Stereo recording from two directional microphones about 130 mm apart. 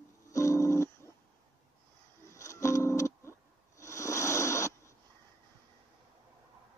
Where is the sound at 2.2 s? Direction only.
25° left (ahead or behind).